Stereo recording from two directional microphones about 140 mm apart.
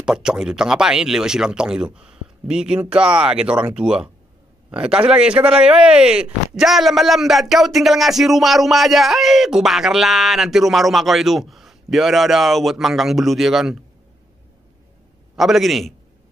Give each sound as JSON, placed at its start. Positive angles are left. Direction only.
{"t": 0.0, "sound": "speech", "side_deg": -5}
{"t": 15.3, "sound": "speech", "side_deg": 0}